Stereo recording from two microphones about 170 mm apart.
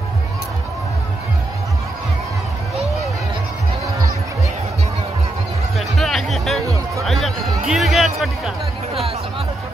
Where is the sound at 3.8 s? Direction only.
20° right (ahead or behind).